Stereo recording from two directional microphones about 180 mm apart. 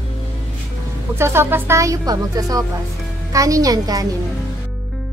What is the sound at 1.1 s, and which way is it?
A woman's voice, 15° right (ahead or behind).